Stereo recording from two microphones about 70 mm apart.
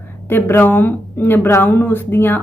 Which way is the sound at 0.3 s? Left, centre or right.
Left.